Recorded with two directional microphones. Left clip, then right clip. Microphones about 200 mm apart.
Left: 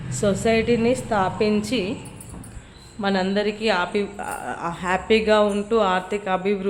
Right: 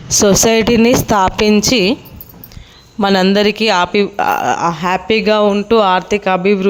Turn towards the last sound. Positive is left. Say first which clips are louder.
# right 10 dB
turn(degrees=-45)  # may be behind; listen again after turning